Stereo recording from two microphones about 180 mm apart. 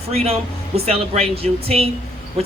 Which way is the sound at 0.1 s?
35° right (ahead or behind).